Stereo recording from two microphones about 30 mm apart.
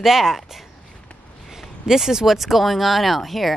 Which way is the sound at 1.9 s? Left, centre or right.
Centre.